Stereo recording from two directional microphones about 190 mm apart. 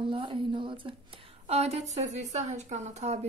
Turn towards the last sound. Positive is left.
turn(degrees=-35)  # may be behind; listen again after turning